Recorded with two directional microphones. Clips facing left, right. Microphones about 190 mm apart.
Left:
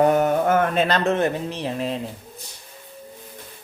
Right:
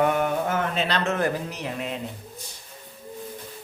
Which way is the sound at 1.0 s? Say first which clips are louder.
Left 4 dB; 25° left (ahead or behind).